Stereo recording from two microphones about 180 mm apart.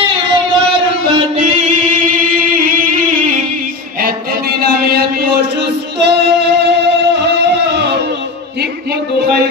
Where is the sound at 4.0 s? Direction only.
55° right (ahead or behind).